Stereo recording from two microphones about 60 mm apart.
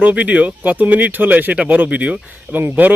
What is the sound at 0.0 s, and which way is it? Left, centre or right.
A man's voice, right.